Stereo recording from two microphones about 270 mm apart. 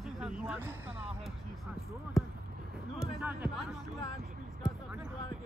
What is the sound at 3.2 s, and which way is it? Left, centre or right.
Music, centre.